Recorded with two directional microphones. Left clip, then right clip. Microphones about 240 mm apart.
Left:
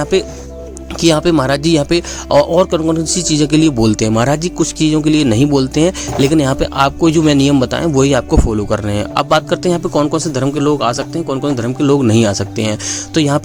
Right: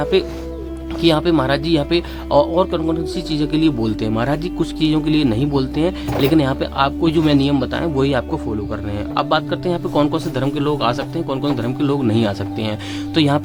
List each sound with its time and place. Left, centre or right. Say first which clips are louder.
0.0 s speech: left 2 dB; left